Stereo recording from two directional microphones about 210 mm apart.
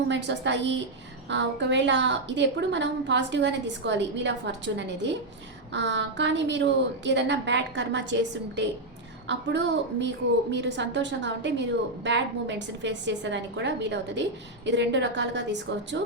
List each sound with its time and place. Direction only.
0.1 s a woman's voice: 55° right (ahead or behind)